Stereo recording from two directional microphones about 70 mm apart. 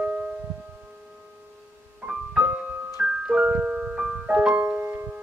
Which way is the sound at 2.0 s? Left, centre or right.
Centre.